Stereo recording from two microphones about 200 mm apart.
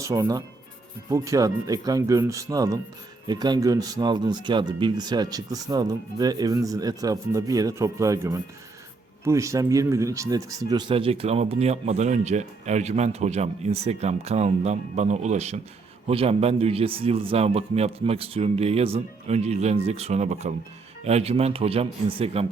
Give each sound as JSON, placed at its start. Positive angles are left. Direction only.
{"t": 0.0, "sound": "speech", "side_deg": -15}